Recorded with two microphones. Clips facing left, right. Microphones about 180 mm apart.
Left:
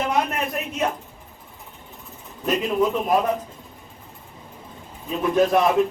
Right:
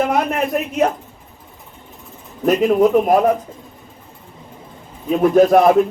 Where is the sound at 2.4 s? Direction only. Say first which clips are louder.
Right 8 dB; 50° right (ahead or behind).